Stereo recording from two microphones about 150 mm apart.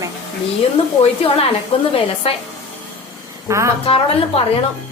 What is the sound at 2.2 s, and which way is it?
Speech, 40° left (ahead or behind).